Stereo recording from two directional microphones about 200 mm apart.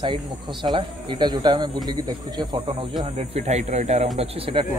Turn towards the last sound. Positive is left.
turn(degrees=-25)  # may be behind; listen again after turning